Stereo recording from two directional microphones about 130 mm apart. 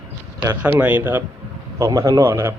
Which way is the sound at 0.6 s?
15° right (ahead or behind).